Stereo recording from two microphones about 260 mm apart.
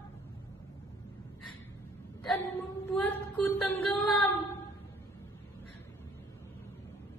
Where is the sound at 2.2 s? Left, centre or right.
Centre.